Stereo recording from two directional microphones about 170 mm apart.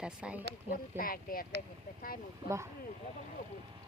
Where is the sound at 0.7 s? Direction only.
60° left (ahead or behind).